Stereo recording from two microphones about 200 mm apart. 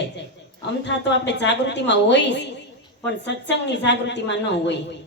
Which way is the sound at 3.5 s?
60° left (ahead or behind).